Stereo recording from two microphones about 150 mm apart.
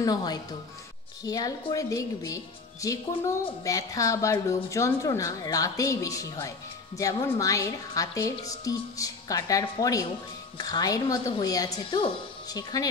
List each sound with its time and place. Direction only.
0.0 s a woman's voice: 25° left (ahead or behind)